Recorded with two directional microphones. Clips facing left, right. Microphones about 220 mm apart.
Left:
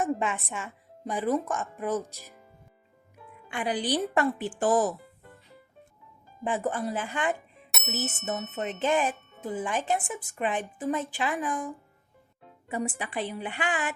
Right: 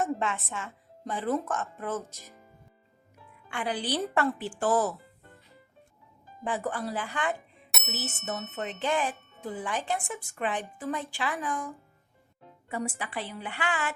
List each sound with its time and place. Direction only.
0.0 s speech: 15° left (ahead or behind)
3.5 s speech: 15° left (ahead or behind)
6.4 s a woman's voice: 20° left (ahead or behind)
7.7 s bicycle bell: centre (ahead or behind)
8.5 s a woman's voice: 20° left (ahead or behind)
9.1 s music: centre (ahead or behind)
9.4 s a woman's voice: 20° left (ahead or behind)